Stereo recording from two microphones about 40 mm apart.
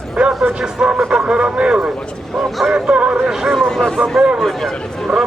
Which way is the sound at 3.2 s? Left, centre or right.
Centre.